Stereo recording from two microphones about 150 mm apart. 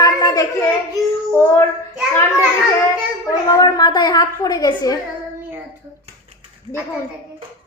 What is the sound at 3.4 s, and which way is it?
A woman's voice, 25° left (ahead or behind).